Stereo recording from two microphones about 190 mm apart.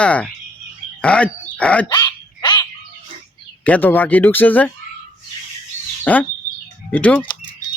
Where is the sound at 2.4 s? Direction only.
25° left (ahead or behind).